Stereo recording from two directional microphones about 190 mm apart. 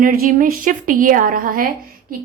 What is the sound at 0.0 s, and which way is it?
A woman's voice, 50° right (ahead or behind).